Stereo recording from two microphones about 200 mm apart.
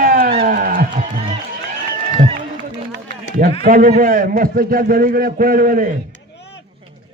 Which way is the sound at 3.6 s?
45° right (ahead or behind).